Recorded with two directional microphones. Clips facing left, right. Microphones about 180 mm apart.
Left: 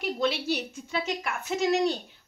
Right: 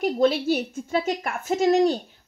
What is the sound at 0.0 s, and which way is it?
A woman's voice, 45° right (ahead or behind).